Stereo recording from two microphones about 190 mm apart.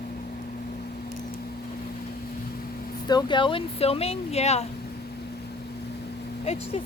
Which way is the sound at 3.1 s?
25° left (ahead or behind).